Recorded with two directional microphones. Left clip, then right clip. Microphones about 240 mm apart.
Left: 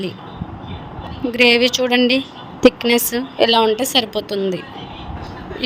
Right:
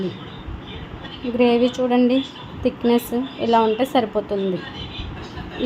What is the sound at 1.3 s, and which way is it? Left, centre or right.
Speech, left.